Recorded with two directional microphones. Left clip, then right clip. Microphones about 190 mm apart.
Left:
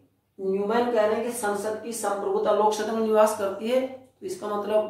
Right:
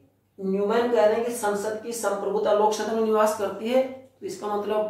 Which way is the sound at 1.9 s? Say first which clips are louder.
Right 1 dB; 10° left (ahead or behind).